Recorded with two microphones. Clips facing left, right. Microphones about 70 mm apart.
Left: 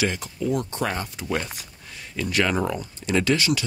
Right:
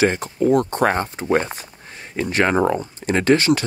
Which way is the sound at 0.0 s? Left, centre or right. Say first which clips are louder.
Right 8 dB; right.